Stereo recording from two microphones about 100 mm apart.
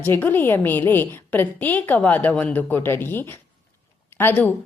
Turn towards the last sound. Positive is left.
turn(degrees=20)  # may be behind; listen again after turning